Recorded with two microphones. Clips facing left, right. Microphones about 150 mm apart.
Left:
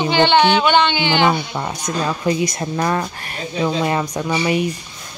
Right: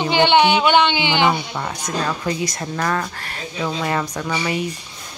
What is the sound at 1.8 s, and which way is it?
A woman's voice, 15° left (ahead or behind).